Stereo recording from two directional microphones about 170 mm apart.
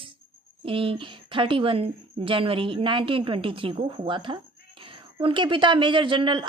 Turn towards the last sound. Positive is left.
turn(degrees=-30)  # may be behind; listen again after turning